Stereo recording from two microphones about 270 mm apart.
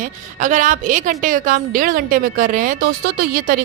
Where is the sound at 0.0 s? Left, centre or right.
Right.